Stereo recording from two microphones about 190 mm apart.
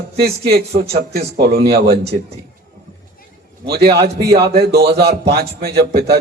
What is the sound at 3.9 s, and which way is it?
Speech, 60° right (ahead or behind).